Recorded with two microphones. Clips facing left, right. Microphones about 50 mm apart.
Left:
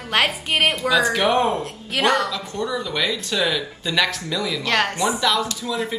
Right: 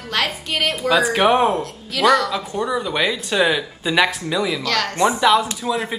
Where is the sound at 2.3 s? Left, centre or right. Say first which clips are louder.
Right 3 dB; right.